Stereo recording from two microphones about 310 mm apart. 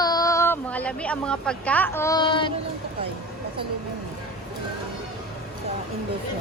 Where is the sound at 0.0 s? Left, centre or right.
Centre.